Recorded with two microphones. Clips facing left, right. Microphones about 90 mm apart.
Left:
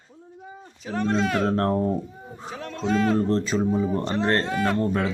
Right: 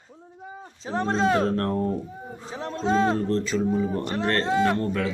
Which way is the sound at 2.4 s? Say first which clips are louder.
Right 1 dB; 25° right (ahead or behind).